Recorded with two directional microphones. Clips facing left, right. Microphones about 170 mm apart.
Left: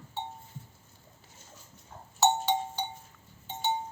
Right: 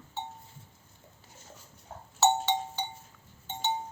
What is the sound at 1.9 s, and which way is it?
Cowbell, 50° right (ahead or behind).